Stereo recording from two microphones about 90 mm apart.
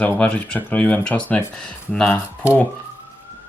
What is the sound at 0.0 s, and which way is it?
Speech, 20° left (ahead or behind).